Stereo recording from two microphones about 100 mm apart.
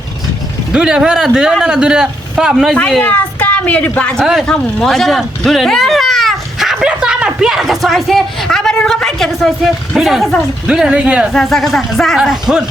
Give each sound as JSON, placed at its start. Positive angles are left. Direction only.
{"t": 0.7, "sound": "a man's voice", "side_deg": -10}
{"t": 3.0, "sound": "speech", "side_deg": 15}
{"t": 11.3, "sound": "speech", "side_deg": 0}